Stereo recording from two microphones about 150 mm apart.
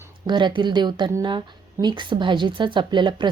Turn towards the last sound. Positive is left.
turn(degrees=-30)  # may be behind; listen again after turning